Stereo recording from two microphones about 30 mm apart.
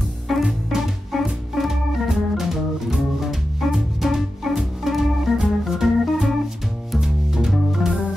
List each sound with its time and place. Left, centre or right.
0.3 s music: centre
1.1 s music: centre
1.5 s organ: centre
7.0 s music: centre